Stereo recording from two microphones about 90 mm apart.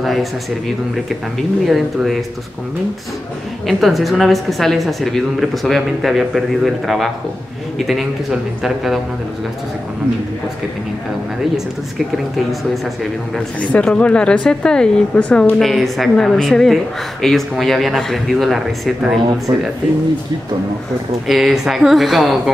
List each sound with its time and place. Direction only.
0.0 s a sound: centre (ahead or behind)
1.7 s speech: centre (ahead or behind)
3.6 s speech: centre (ahead or behind)
13.6 s speech: 15° left (ahead or behind)
15.6 s speech: centre (ahead or behind)
19.5 s speech: 45° right (ahead or behind)
21.3 s speech: 5° right (ahead or behind)